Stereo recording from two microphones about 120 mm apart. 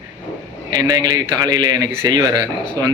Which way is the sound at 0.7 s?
35° right (ahead or behind).